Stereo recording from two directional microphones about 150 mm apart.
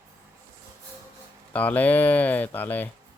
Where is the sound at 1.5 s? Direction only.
10° left (ahead or behind).